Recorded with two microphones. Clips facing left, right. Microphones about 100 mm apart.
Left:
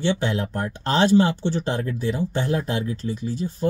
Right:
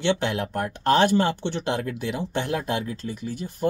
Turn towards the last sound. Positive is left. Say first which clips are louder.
# left 2 dB
turn(degrees=-55)  # may be behind; listen again after turning